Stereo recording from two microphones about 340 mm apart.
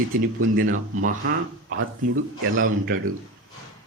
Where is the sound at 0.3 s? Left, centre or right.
Right.